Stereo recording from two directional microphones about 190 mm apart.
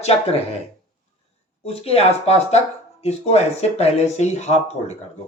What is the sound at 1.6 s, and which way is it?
Speech, 30° left (ahead or behind).